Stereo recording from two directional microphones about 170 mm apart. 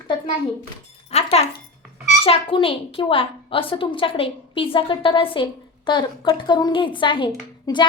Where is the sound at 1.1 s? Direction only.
35° left (ahead or behind).